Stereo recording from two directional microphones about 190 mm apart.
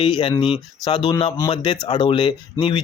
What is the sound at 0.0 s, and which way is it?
Speech, 25° left (ahead or behind).